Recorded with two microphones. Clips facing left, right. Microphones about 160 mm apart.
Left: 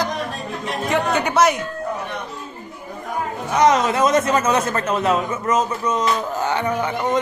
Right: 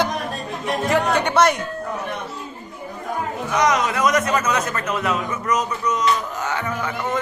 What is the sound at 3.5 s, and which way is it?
A man's voice, 30° left (ahead or behind).